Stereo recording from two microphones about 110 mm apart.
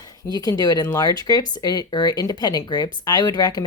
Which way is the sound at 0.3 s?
35° left (ahead or behind).